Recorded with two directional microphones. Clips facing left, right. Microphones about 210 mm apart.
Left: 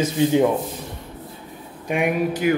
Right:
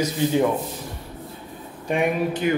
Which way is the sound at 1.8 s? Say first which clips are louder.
Left 1 dB; 10° left (ahead or behind).